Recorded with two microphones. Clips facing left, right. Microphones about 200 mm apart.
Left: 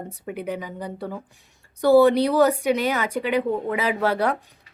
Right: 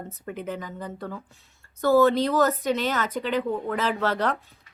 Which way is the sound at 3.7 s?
10° left (ahead or behind).